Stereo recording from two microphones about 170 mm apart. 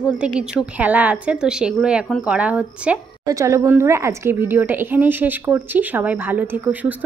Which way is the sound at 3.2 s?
20° right (ahead or behind).